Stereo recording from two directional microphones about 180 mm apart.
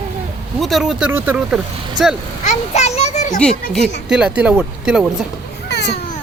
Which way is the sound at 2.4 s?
40° left (ahead or behind).